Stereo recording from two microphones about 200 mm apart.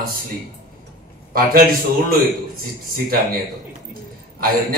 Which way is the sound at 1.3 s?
45° right (ahead or behind).